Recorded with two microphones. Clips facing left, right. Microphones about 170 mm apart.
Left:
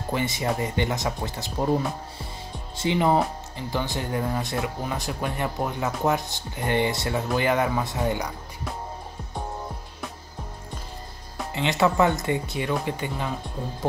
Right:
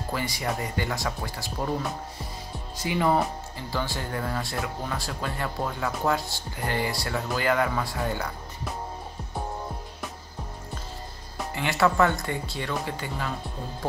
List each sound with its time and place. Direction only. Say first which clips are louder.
0.1 s speech: left 4 dB; 25° left (ahead or behind)
2.8 s speech: left 2 dB; 20° left (ahead or behind)
11.5 s speech: left 2 dB; 20° left (ahead or behind)